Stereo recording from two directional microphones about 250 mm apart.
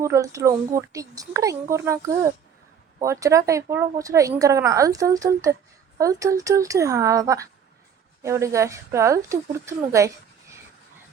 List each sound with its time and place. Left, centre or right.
0.0 s speech: centre